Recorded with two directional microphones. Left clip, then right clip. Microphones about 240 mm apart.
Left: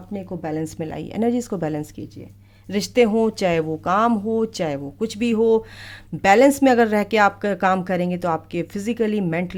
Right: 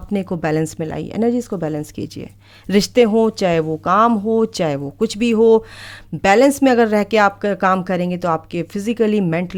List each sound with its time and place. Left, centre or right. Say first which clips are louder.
0.1 s a woman's voice: right 8 dB; right
0.6 s speech: right 5 dB; centre
2.6 s speech: right 4 dB; right